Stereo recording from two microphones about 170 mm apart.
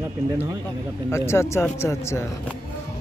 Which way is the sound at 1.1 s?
15° left (ahead or behind).